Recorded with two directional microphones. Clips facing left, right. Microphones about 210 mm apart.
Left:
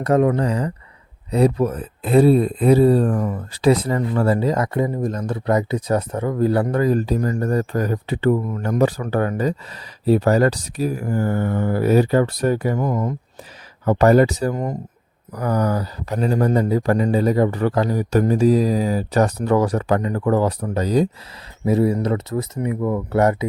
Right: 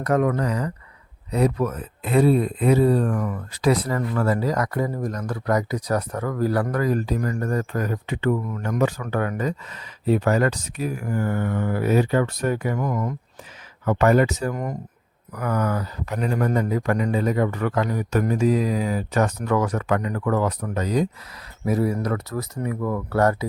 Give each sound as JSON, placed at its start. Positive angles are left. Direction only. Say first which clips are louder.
{"t": 0.0, "sound": "speech", "louder": "left 4 dB", "side_deg": 25}